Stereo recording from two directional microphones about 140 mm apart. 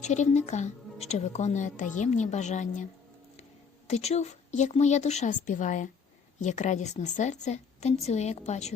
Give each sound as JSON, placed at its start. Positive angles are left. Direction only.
{"t": 0.0, "sound": "a woman's voice", "side_deg": 55}
{"t": 3.8, "sound": "a woman's voice", "side_deg": 50}